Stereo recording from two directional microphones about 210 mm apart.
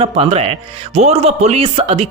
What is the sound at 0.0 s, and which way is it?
Speech, 30° right (ahead or behind).